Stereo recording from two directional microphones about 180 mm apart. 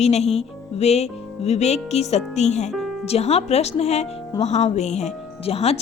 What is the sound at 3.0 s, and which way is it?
A woman's voice, 35° left (ahead or behind).